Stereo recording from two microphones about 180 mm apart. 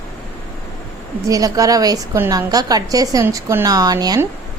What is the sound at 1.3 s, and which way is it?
A woman's voice, 20° right (ahead or behind).